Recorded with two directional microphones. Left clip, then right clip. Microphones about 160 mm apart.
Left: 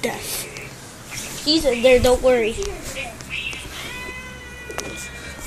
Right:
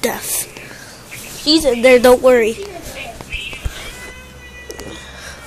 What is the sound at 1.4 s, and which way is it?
A woman's voice, 45° right (ahead or behind).